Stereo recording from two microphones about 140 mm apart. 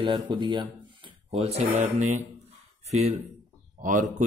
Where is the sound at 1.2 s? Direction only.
50° right (ahead or behind).